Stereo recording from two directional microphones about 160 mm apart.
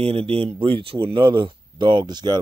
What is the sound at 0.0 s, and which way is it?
Speech, 35° right (ahead or behind).